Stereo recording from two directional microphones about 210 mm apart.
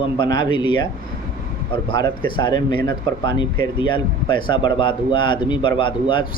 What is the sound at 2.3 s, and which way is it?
Speech, 20° left (ahead or behind).